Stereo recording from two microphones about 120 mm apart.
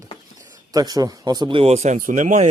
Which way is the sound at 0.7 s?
30° right (ahead or behind).